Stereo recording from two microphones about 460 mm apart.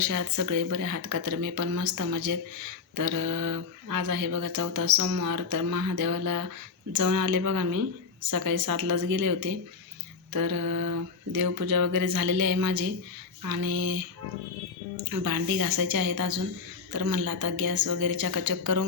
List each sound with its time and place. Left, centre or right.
0.0 s speech: right
15.1 s speech: right